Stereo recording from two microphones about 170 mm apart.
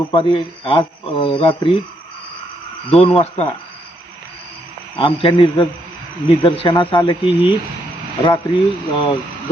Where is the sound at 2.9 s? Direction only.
35° left (ahead or behind).